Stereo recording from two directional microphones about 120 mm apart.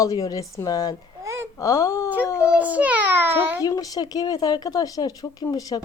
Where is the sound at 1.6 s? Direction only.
30° left (ahead or behind).